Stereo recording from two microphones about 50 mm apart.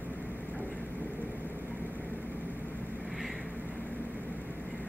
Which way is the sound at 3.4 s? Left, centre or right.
Right.